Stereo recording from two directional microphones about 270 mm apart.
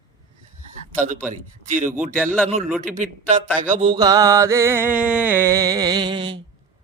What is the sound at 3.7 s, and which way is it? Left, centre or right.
Music, right.